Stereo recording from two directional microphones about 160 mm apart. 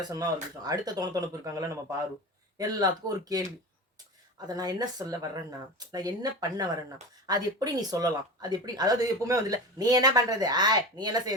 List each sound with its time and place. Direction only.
0.0 s speech: 25° right (ahead or behind)
7.3 s speech: 25° right (ahead or behind)